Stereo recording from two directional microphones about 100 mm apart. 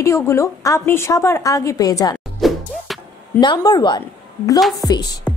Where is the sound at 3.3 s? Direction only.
45° left (ahead or behind).